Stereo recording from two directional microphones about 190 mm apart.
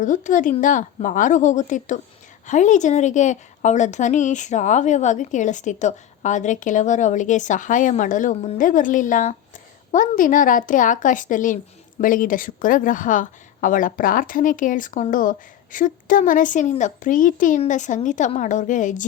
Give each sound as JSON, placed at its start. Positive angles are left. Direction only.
{"t": 0.0, "sound": "a woman's voice", "side_deg": 40}